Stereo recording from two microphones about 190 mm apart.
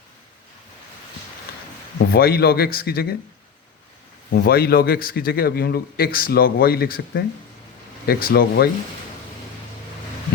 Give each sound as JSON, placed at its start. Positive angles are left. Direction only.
{"t": 2.1, "sound": "speech", "side_deg": 55}
{"t": 4.3, "sound": "a man's voice", "side_deg": 55}